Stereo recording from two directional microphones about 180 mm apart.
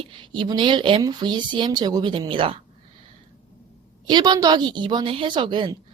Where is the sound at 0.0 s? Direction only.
25° right (ahead or behind).